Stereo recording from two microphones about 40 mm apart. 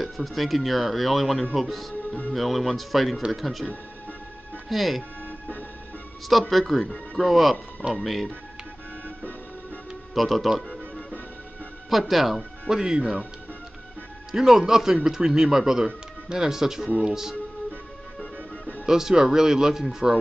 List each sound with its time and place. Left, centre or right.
0.0 s speech: centre
4.6 s speech: centre
6.3 s speech: centre
10.1 s speech: centre
11.9 s speech: centre
12.6 s speech: centre
14.3 s speech: centre
18.2 s music: left
18.9 s speech: centre